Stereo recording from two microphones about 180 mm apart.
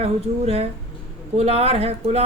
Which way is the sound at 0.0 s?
35° right (ahead or behind).